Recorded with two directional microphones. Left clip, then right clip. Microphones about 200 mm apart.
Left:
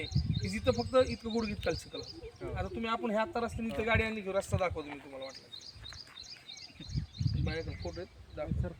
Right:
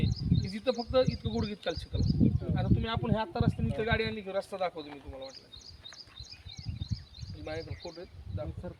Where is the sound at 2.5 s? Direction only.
Centre (ahead or behind).